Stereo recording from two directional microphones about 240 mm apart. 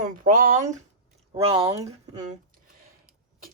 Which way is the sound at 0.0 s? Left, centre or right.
Right.